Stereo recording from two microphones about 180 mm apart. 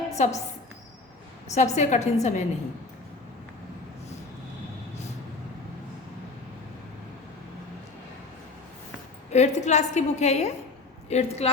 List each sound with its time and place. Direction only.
0.2 s a woman's voice: 40° left (ahead or behind)
1.5 s a woman's voice: 40° left (ahead or behind)
9.3 s a woman's voice: 40° left (ahead or behind)